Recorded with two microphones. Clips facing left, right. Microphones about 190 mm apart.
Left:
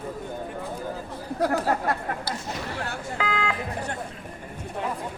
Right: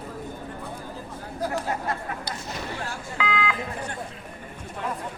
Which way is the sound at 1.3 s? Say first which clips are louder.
Left 5 dB; 65° left (ahead or behind).